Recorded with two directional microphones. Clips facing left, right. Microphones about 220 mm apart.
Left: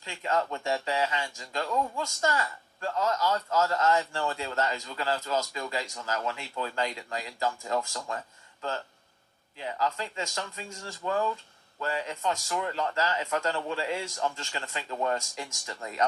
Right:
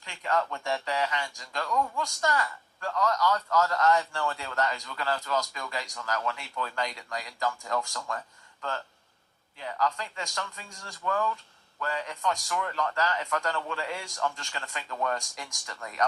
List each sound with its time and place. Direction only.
0.1 s a man's voice: 20° left (ahead or behind)
9.6 s a man's voice: 20° left (ahead or behind)